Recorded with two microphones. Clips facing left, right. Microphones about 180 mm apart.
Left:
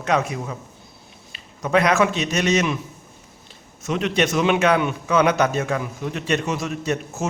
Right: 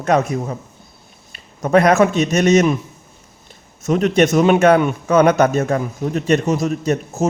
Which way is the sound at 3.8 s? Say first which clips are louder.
Right 7 dB; 45° right (ahead or behind).